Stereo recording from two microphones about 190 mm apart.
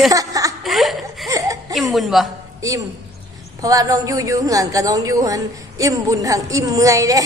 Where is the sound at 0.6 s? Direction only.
Centre (ahead or behind).